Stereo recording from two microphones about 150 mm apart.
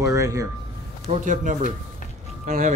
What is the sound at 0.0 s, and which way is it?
Speech, 20° right (ahead or behind).